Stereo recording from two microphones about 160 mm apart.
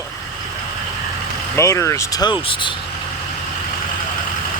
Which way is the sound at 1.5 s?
20° left (ahead or behind).